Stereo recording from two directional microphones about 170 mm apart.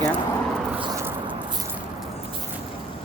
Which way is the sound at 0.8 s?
25° right (ahead or behind).